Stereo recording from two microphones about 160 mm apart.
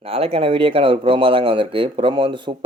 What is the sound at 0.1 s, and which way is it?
Speech, 40° right (ahead or behind).